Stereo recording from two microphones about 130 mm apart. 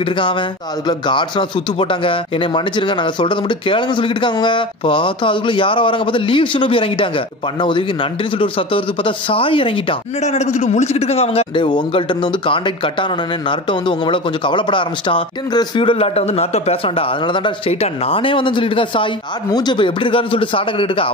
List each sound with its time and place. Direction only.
0.0 s a man's voice: 40° left (ahead or behind)
10.2 s a man's voice: 60° left (ahead or behind)
11.6 s a man's voice: 35° left (ahead or behind)